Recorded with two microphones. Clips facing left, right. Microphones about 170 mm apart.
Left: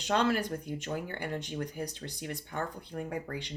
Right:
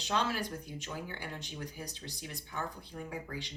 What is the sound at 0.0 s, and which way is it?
Speech, 55° left (ahead or behind).